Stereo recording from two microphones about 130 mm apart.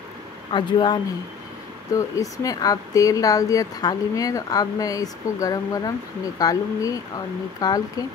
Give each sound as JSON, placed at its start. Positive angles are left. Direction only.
{"t": 0.5, "sound": "speech", "side_deg": 40}
{"t": 2.0, "sound": "speech", "side_deg": 25}